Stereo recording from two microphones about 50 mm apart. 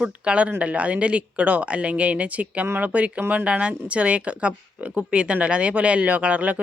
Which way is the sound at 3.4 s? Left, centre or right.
Right.